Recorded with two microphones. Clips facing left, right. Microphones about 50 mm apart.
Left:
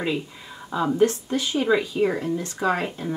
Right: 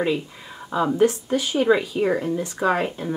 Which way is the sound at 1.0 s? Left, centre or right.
Centre.